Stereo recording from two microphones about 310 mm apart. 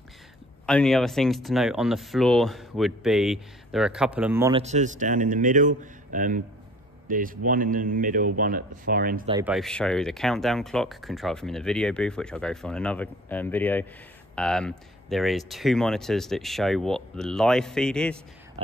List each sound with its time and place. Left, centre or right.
0.7 s speech: centre; by 9.3 s right
9.3 s speech: centre